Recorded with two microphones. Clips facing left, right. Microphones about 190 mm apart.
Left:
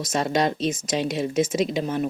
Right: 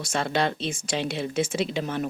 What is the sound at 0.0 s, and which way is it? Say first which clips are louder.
Speech: left 3 dB; 40° left (ahead or behind).